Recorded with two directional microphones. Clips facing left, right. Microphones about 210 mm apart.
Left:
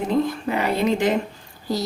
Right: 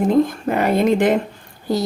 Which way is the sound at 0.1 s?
50° right (ahead or behind).